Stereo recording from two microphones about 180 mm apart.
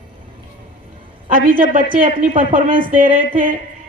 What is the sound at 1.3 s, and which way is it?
Speech, 50° right (ahead or behind).